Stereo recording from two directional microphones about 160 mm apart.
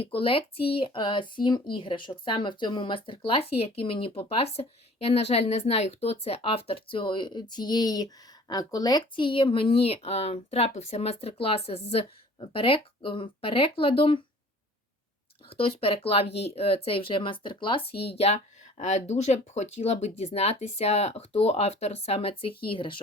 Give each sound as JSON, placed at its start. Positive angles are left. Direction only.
{"t": 0.0, "sound": "speech", "side_deg": 35}
{"t": 15.4, "sound": "speech", "side_deg": 35}